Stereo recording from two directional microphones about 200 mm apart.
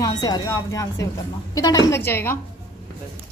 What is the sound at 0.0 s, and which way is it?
A woman's voice, 20° left (ahead or behind).